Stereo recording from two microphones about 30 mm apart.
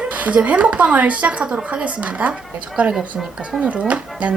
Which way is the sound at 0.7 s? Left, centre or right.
Right.